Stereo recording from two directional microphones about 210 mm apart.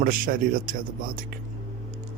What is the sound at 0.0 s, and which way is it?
Speech, 45° right (ahead or behind).